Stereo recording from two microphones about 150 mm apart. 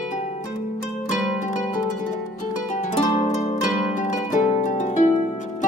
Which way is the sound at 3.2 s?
55° left (ahead or behind).